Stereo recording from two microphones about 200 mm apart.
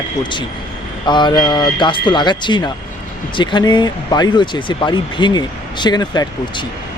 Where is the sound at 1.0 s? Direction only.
20° left (ahead or behind).